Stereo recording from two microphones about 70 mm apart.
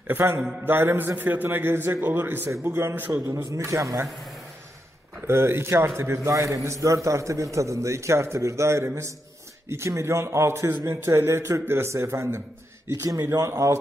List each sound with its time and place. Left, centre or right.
0.1 s a man's voice: right
3.5 s a man's voice: right
5.2 s a man's voice: right